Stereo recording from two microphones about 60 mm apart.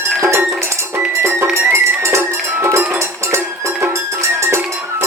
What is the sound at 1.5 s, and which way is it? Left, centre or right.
Music, right.